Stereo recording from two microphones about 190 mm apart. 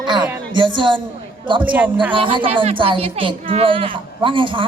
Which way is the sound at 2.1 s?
25° right (ahead or behind).